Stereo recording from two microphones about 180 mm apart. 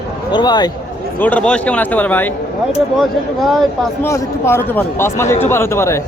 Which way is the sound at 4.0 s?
15° left (ahead or behind).